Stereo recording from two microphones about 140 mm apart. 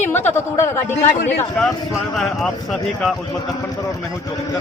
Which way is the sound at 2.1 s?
Centre (ahead or behind).